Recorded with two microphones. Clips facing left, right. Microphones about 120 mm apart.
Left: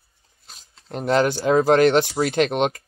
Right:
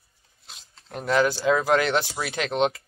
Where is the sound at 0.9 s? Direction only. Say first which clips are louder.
Left 3 dB; 20° left (ahead or behind).